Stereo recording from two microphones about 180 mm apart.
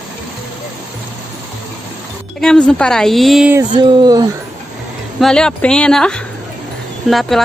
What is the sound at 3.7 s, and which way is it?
Speech, 25° right (ahead or behind).